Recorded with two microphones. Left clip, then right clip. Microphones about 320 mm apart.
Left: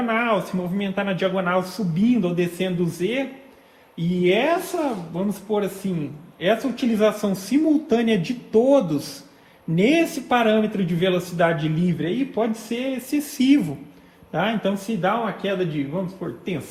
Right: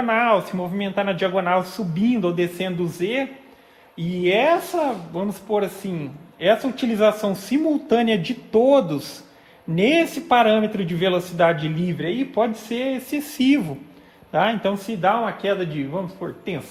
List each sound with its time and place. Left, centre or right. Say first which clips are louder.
0.1 s a man's voice: right 5 dB; right